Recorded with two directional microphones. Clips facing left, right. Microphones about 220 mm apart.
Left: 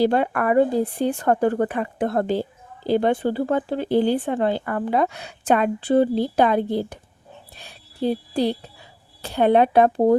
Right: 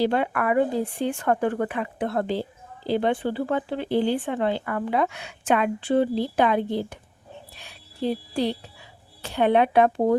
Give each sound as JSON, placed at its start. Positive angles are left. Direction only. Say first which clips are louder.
{"t": 0.0, "sound": "speech", "louder": "left 3 dB", "side_deg": 40}